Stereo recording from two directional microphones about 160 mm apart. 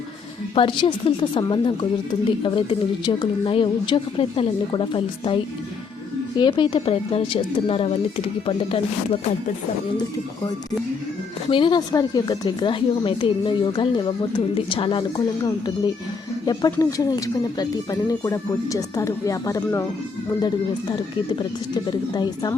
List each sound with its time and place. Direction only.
0.5 s a woman's voice: 30° left (ahead or behind)
11.4 s a woman's voice: 30° left (ahead or behind)
21.8 s speech: 25° left (ahead or behind)